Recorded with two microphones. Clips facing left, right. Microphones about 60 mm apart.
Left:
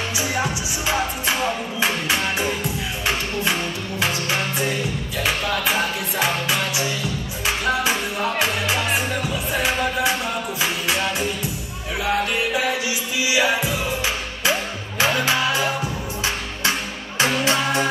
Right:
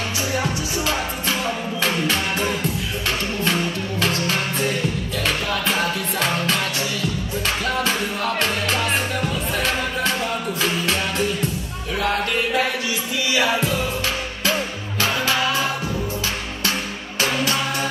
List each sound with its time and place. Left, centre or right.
0.4 s music: left
5.2 s music: centre
13.2 s music: centre
15.0 s music: left
17.2 s music: left